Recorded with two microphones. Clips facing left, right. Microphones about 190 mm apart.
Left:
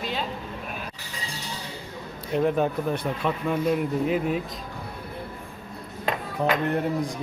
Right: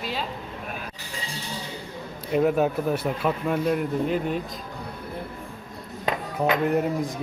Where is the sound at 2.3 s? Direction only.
5° right (ahead or behind).